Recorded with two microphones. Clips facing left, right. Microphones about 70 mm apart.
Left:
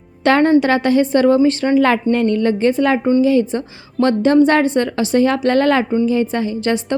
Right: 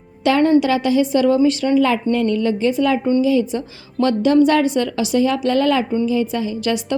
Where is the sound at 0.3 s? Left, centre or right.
Left.